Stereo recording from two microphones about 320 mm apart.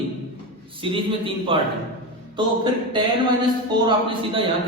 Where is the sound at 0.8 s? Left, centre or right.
Centre.